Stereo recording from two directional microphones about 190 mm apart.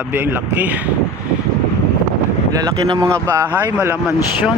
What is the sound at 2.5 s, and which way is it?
Speech, 20° right (ahead or behind).